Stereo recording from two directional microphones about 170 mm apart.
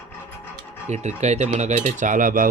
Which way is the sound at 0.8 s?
45° right (ahead or behind).